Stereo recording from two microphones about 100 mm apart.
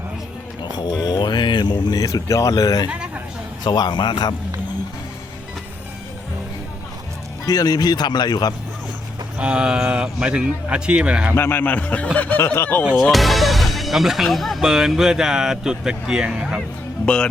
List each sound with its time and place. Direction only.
0.7 s a sound: 45° left (ahead or behind)
3.6 s speech: 45° left (ahead or behind)
7.4 s speech: 40° left (ahead or behind)
9.4 s a man's voice: 10° right (ahead or behind)
11.3 s a man's voice: 20° left (ahead or behind)
13.0 s speech: centre (ahead or behind)